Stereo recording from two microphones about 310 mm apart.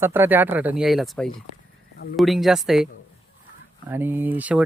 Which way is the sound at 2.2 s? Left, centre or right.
Centre.